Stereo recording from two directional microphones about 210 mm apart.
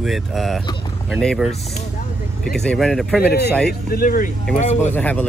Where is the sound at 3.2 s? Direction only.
50° left (ahead or behind); by 4.9 s 35° left (ahead or behind).